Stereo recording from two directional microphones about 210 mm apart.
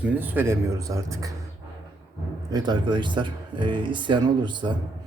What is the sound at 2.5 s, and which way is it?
Speech, 20° right (ahead or behind).